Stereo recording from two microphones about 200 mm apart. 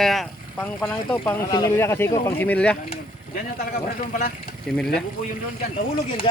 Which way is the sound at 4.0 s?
40° left (ahead or behind).